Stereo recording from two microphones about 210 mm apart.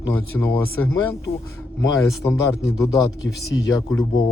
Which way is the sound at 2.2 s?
15° left (ahead or behind).